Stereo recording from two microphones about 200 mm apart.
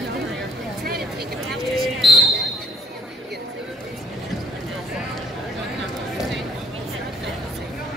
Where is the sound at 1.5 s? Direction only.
Centre (ahead or behind).